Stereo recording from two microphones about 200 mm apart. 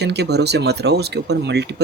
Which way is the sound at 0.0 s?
55° right (ahead or behind).